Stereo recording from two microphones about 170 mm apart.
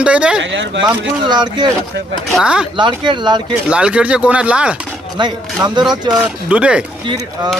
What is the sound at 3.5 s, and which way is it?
Speech, 5° right (ahead or behind).